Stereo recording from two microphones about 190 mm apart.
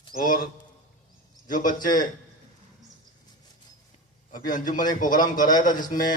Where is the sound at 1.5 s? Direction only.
45° left (ahead or behind).